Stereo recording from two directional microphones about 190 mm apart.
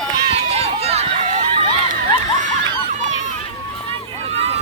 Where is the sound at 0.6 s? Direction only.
35° right (ahead or behind).